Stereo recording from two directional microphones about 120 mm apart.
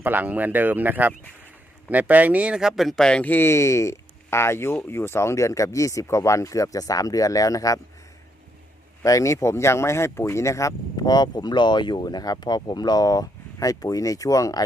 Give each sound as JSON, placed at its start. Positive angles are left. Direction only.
{"t": 0.0, "sound": "speech", "side_deg": -15}
{"t": 9.0, "sound": "speech", "side_deg": 25}